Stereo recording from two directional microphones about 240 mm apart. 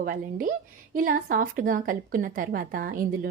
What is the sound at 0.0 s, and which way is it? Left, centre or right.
Speech, right.